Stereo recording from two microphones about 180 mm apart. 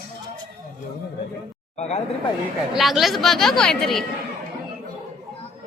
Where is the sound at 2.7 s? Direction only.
Centre (ahead or behind).